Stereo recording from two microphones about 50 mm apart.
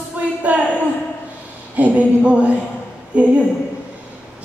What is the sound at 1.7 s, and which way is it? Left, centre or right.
Speech, right.